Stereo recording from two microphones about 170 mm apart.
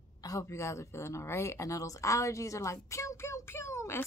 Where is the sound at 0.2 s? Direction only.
20° left (ahead or behind).